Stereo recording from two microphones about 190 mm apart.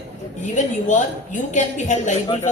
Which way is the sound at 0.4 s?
40° left (ahead or behind).